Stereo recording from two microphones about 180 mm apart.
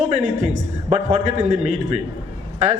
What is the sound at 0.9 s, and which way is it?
Speech, 40° right (ahead or behind).